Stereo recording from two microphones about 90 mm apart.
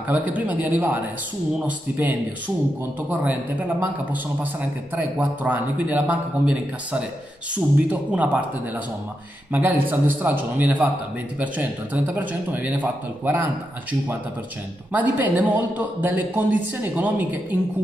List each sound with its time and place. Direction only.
0.1 s a man's voice: 15° right (ahead or behind)
9.5 s a man's voice: 20° right (ahead or behind)
14.9 s speech: 20° right (ahead or behind)